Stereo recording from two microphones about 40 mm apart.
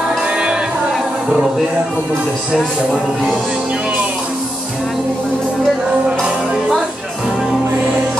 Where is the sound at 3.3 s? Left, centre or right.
Right.